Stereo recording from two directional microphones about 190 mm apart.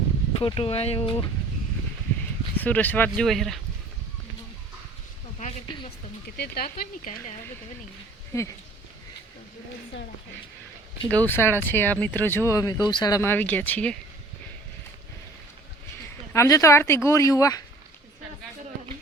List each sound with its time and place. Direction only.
0.3 s speech: 30° left (ahead or behind)
2.6 s speech: 10° left (ahead or behind)
6.2 s speech: 55° left (ahead or behind)
8.3 s speech: 15° left (ahead or behind)
11.1 s speech: 10° left (ahead or behind)
16.3 s speech: 15° left (ahead or behind)